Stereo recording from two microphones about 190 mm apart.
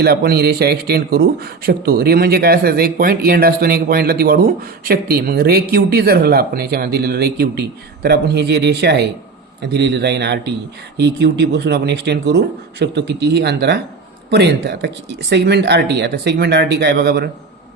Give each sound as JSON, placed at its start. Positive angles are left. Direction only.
{"t": 0.0, "sound": "speech", "side_deg": -55}